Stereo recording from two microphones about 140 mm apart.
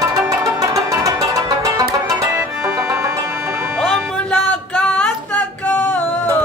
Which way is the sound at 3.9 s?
5° left (ahead or behind).